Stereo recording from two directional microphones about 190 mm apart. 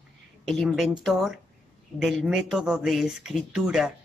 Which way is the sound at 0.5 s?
Centre (ahead or behind).